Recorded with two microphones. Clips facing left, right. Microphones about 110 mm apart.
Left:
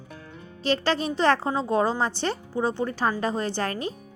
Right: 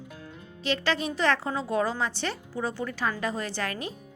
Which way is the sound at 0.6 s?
35° left (ahead or behind).